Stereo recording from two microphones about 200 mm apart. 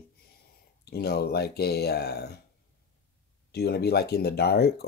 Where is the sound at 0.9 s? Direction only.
50° left (ahead or behind).